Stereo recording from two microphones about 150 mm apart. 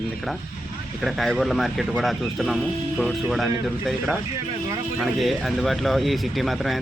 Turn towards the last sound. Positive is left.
turn(degrees=0)  # may be behind; listen again after turning